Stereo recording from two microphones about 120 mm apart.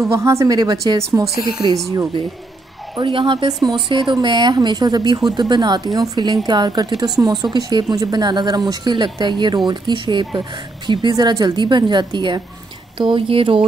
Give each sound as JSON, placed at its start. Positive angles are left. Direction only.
{"t": 0.0, "sound": "speech", "side_deg": -25}
{"t": 0.6, "sound": "speech", "side_deg": -35}
{"t": 3.0, "sound": "speech", "side_deg": -45}